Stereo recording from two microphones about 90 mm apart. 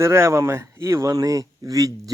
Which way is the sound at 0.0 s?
30° right (ahead or behind).